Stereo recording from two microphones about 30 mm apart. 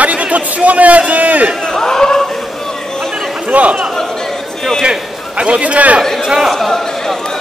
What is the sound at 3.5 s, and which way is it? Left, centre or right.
Chatter, right.